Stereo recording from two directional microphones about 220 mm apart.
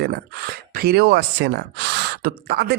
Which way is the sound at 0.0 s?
45° right (ahead or behind).